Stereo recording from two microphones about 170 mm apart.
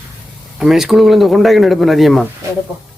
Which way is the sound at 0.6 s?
Centre (ahead or behind).